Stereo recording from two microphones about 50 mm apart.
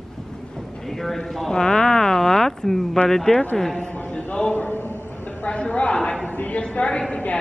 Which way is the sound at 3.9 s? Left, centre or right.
Left.